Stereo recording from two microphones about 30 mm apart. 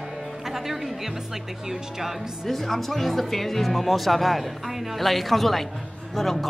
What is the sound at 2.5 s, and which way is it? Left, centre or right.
Speech, centre.